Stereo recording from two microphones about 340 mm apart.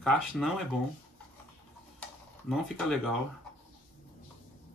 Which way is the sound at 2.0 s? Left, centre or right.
Centre.